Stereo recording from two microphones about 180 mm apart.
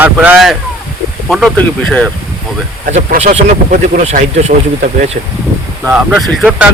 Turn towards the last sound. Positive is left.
turn(degrees=-5)  # may be behind; listen again after turning